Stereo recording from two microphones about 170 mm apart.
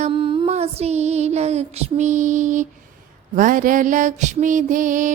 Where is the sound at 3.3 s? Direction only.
50° right (ahead or behind).